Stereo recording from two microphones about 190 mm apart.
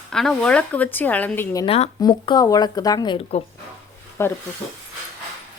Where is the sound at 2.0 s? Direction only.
20° left (ahead or behind).